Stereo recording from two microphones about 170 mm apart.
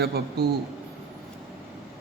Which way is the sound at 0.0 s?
70° right (ahead or behind).